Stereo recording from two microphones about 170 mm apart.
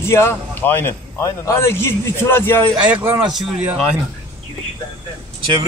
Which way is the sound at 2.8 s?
10° right (ahead or behind).